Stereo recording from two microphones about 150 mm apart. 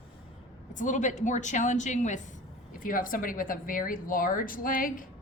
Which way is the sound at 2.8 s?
65° left (ahead or behind).